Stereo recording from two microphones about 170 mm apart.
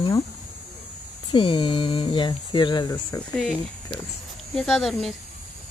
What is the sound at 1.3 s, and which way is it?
Speech, 30° left (ahead or behind).